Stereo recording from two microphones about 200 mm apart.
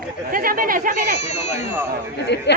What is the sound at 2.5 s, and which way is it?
Speech, 60° left (ahead or behind).